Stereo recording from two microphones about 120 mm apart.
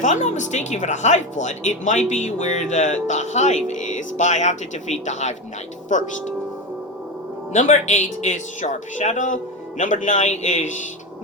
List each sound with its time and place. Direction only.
0.0 s speech: 90° left
5.9 s speech: 90° left
7.5 s speech: 80° left